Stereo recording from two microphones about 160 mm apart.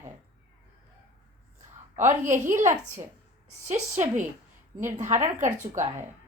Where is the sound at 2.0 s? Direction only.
50° right (ahead or behind).